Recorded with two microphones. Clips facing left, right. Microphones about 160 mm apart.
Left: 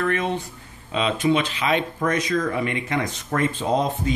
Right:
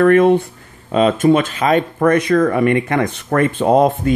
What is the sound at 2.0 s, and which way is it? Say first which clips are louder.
Speech: right 9 dB; 60° right (ahead or behind).